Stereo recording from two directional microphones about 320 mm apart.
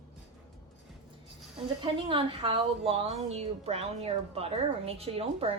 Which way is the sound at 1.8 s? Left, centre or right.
Centre.